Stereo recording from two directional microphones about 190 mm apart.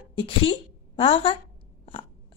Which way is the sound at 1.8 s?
30° left (ahead or behind).